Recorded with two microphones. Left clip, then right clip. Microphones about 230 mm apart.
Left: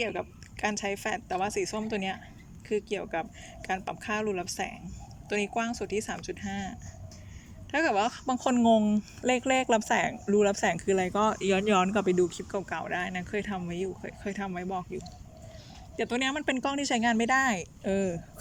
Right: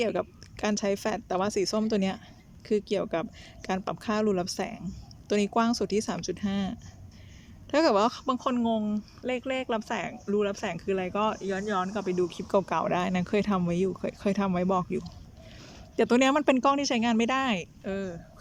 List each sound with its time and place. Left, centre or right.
0.0 s speech: centre
8.4 s speech: centre
17.8 s speech: centre